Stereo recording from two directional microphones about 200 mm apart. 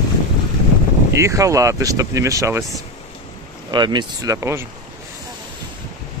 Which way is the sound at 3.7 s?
20° right (ahead or behind).